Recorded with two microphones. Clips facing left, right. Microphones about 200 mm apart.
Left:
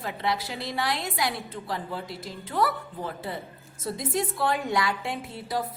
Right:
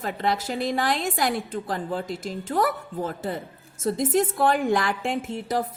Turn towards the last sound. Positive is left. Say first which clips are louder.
# right 5 dB
turn(degrees=-45)  # may be behind; listen again after turning